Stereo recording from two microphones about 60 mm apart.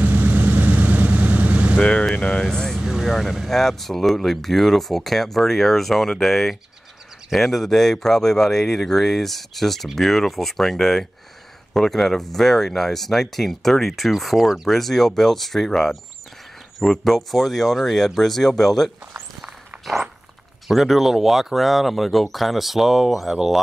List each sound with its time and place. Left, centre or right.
0.0 s vehicle: right
1.8 s speech: centre
2.8 s vehicle: centre
3.1 s speech: centre
19.4 s walk: centre
20.6 s speech: centre